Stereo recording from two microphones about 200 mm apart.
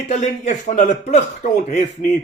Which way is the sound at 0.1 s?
35° left (ahead or behind).